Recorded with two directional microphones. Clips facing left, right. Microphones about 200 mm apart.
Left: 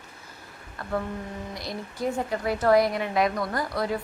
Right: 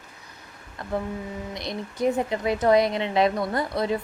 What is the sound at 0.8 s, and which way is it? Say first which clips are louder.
A woman's voice: right 1 dB; 20° right (ahead or behind).